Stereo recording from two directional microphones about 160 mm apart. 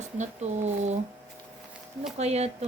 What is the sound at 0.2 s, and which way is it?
Speech, 45° right (ahead or behind).